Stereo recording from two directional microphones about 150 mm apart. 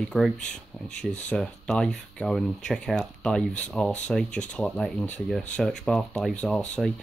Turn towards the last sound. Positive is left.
turn(degrees=-5)  # may be behind; listen again after turning